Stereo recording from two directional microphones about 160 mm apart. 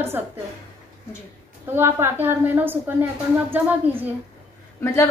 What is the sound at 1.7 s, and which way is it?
A woman's voice, 15° right (ahead or behind).